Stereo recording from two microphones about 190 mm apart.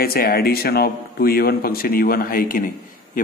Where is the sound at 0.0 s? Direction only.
50° left (ahead or behind).